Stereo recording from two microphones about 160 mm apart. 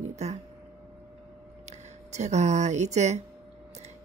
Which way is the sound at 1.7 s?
45° right (ahead or behind).